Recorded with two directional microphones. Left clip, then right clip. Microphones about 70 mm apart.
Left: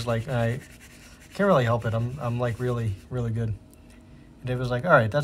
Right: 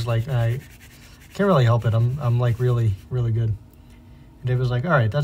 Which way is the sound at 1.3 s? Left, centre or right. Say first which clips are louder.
Right 2 dB; centre.